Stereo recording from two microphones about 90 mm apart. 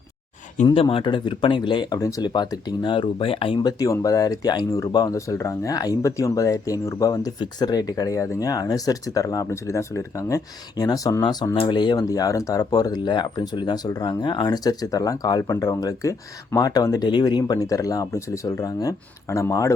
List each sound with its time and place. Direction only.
0.7 s speech: 80° left; by 2.0 s 60° left (ahead or behind)
2.0 s speech: 40° left (ahead or behind)
2.2 s speech: 55° left (ahead or behind); by 3.6 s 85° left
3.6 s speech: 45° left (ahead or behind)
4.9 s speech: 55° left (ahead or behind)
5.1 s speech: 35° left (ahead or behind)
17.1 s speech: 55° left (ahead or behind); by 19.7 s 35° left (ahead or behind)